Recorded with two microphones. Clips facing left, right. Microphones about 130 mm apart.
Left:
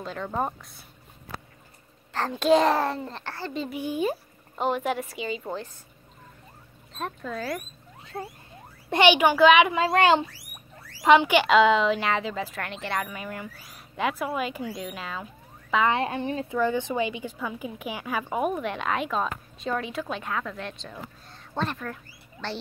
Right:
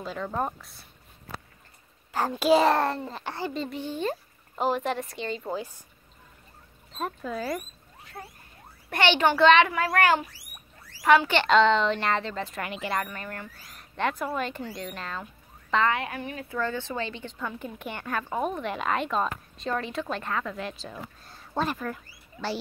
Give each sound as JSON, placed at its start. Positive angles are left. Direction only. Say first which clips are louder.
{"t": 0.0, "sound": "a woman's voice", "louder": "left 1 dB", "side_deg": 0}
{"t": 2.1, "sound": "a woman's voice", "louder": "left 1 dB", "side_deg": -10}
{"t": 3.3, "sound": "a child's voice", "louder": "right 3 dB", "side_deg": -15}
{"t": 3.5, "sound": "a child's voice", "louder": "left 3 dB", "side_deg": 5}
{"t": 4.6, "sound": "a woman's voice", "louder": "even", "side_deg": 0}
{"t": 5.5, "sound": "a child's voice", "louder": "right 1 dB", "side_deg": -10}
{"t": 6.9, "sound": "a woman's voice", "louder": "right 1 dB", "side_deg": -5}
{"t": 8.0, "sound": "rodents", "louder": "left 7 dB", "side_deg": 25}
{"t": 8.9, "sound": "a child's voice", "louder": "left 4 dB", "side_deg": 15}
{"t": 9.7, "sound": "a woman's voice", "louder": "left 3 dB", "side_deg": 20}
{"t": 13.0, "sound": "a woman's voice", "louder": "left 2 dB", "side_deg": 5}
{"t": 15.9, "sound": "a woman's voice", "louder": "left 4 dB", "side_deg": 25}
{"t": 16.5, "sound": "a woman's voice", "louder": "left 4 dB", "side_deg": 15}